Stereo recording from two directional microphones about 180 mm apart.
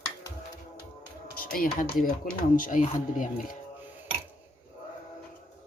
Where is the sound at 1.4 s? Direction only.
50° left (ahead or behind).